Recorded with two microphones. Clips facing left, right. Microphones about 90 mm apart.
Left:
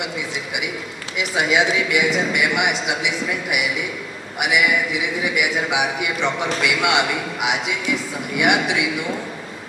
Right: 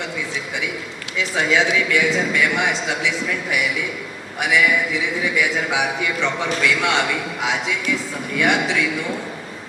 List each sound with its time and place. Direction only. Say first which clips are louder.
1.1 s a man's voice: even; 15° left (ahead or behind)